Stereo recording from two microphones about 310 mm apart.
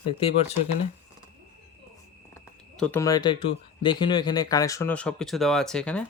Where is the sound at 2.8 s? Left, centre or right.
Centre.